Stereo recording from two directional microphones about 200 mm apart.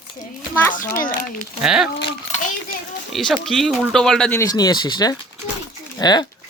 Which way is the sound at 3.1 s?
Centre (ahead or behind).